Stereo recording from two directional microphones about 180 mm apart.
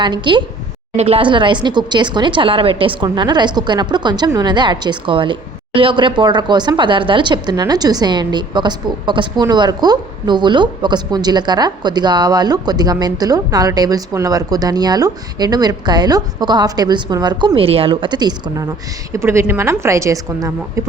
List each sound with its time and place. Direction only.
0.0 s a woman's voice: 25° right (ahead or behind)